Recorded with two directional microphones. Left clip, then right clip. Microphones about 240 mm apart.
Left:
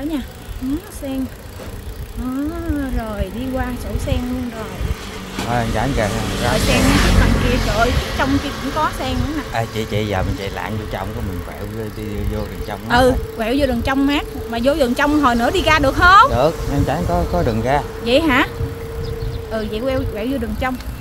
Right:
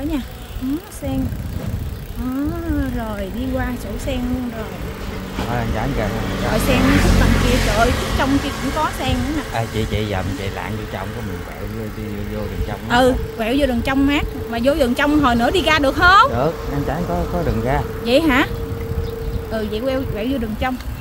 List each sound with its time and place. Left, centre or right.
3.5 s speech: centre
5.4 s speech: left
7.3 s speech: centre; by 9.4 s right
9.5 s speech: left
12.9 s speech: centre
16.3 s speech: left
18.0 s speech: centre
19.5 s speech: centre